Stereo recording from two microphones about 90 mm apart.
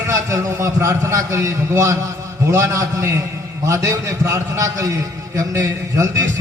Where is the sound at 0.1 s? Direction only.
30° right (ahead or behind).